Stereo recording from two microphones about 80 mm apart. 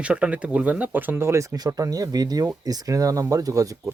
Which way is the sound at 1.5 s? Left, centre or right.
Right.